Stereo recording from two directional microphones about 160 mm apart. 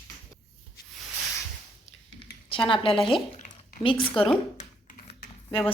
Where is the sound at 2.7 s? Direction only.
35° left (ahead or behind).